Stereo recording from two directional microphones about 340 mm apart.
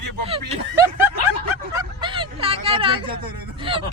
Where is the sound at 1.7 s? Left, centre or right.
Centre.